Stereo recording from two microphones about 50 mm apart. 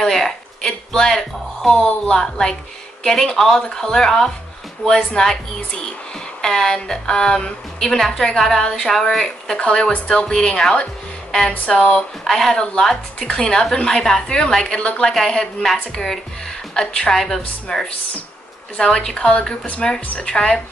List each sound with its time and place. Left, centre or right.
0.0 s a woman's voice: centre
10.3 s a woman's voice: centre
12.3 s a woman's voice: centre
15.1 s a woman's voice: centre